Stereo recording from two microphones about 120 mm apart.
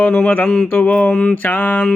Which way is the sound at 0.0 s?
10° left (ahead or behind).